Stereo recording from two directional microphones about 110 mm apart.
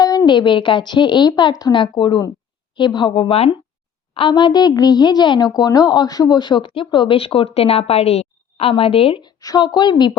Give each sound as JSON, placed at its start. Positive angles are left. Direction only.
{"t": 0.0, "sound": "a woman's voice", "side_deg": 35}
{"t": 4.1, "sound": "a woman's voice", "side_deg": 50}
{"t": 9.2, "sound": "a woman's voice", "side_deg": 40}